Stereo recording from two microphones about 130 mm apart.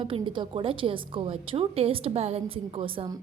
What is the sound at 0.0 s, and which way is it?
A woman's voice, 40° right (ahead or behind).